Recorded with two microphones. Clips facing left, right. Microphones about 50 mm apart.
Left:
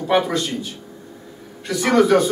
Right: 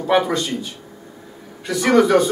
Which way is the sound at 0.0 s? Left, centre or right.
Centre.